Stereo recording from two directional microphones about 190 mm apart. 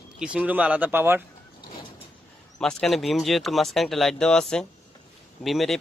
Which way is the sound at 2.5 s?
Centre (ahead or behind).